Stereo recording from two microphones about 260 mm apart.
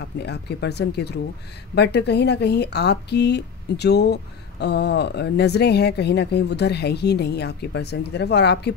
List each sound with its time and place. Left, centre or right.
0.0 s speech: left